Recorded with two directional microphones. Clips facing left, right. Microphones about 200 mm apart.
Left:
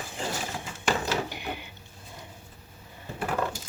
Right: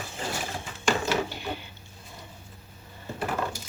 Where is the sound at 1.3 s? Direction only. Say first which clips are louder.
Right 1 dB; 15° left (ahead or behind).